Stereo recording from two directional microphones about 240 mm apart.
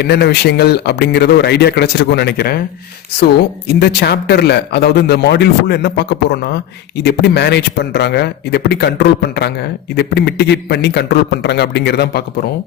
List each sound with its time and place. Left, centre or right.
0.0 s a man's voice: left
3.8 s a man's voice: left